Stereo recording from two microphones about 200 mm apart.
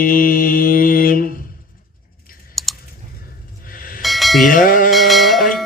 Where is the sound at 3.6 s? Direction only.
45° left (ahead or behind).